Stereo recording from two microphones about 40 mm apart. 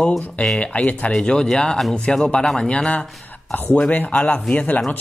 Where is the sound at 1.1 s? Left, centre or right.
Left.